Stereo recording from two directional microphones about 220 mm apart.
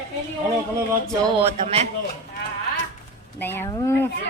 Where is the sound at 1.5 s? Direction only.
30° right (ahead or behind).